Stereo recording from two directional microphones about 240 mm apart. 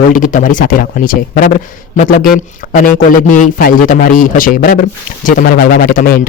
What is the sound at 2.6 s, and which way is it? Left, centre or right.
A man's voice, left.